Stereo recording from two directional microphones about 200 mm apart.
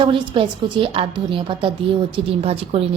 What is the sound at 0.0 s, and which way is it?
A woman's voice, 25° right (ahead or behind).